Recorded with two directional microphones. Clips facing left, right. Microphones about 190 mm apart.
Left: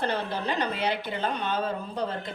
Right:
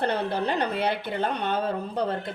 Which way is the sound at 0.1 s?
60° right (ahead or behind).